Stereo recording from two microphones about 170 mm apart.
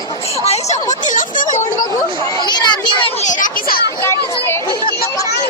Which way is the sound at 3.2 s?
55° left (ahead or behind).